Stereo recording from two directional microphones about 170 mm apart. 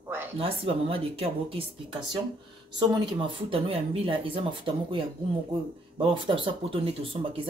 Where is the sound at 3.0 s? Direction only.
30° right (ahead or behind).